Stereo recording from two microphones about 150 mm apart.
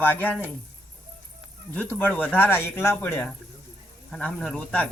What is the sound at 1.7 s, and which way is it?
A man's voice, 10° left (ahead or behind).